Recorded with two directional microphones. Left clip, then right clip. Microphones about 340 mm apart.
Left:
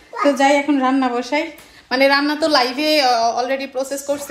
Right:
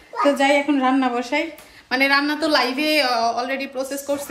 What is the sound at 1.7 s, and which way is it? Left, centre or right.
A woman's voice, centre.